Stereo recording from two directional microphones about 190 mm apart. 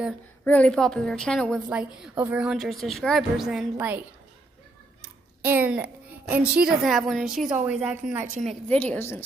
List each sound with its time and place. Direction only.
0.5 s a woman's voice: 5° left (ahead or behind)
5.4 s a child's voice: 10° right (ahead or behind)
8.6 s a woman's voice: 10° left (ahead or behind)